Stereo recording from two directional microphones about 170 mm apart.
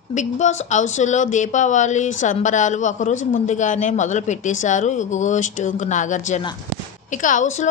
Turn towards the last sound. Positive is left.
turn(degrees=45)  # may be behind; listen again after turning